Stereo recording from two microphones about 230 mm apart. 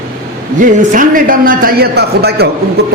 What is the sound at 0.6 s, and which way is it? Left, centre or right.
A man's voice, right.